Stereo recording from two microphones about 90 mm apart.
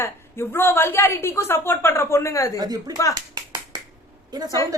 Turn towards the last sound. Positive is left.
turn(degrees=-50)  # may be behind; listen again after turning